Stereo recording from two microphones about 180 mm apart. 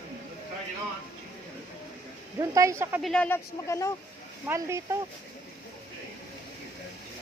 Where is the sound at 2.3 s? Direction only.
20° right (ahead or behind).